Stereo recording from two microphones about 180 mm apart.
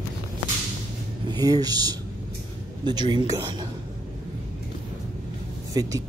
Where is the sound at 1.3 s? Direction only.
20° right (ahead or behind).